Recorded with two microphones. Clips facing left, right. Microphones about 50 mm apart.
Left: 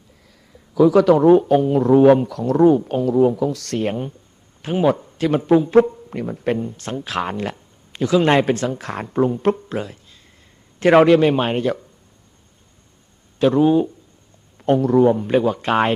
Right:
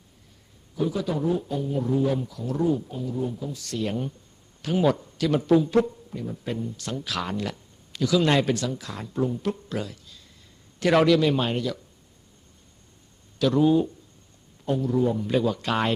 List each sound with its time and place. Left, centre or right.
0.9 s a man's voice: left
3.8 s speech: left
6.1 s speech: left
9.7 s speech: left
13.4 s a man's voice: left
14.6 s speech: left